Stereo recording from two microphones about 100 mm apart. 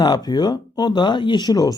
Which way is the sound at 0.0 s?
40° left (ahead or behind).